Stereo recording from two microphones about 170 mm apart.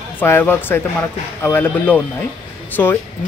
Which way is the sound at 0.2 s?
10° left (ahead or behind).